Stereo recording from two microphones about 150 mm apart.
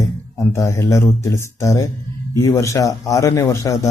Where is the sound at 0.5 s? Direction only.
20° left (ahead or behind).